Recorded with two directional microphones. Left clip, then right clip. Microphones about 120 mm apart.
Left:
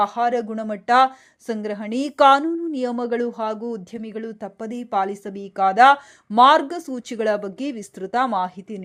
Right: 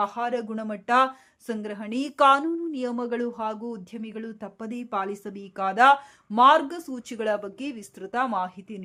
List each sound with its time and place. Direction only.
0.0 s speech: 35° left (ahead or behind)